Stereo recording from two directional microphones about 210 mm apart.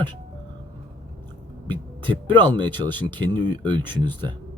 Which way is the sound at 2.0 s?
25° right (ahead or behind).